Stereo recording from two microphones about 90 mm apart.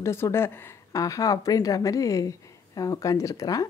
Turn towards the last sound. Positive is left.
turn(degrees=40)  # may be behind; listen again after turning